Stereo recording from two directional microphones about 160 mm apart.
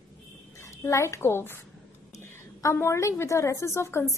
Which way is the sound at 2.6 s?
15° left (ahead or behind).